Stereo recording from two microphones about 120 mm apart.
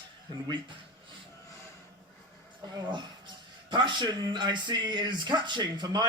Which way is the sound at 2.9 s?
40° right (ahead or behind).